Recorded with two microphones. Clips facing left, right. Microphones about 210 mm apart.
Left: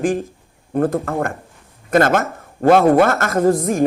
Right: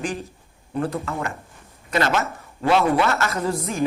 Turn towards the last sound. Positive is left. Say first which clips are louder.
# left 8 dB
turn(degrees=50)  # may be behind; listen again after turning